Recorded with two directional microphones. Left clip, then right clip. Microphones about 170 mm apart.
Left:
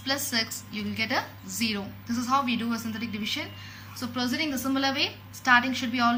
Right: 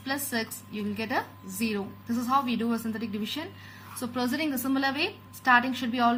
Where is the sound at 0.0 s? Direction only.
50° right (ahead or behind).